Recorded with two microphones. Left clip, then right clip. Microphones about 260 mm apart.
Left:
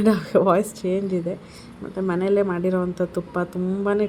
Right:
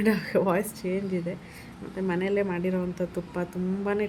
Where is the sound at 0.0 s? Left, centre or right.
Centre.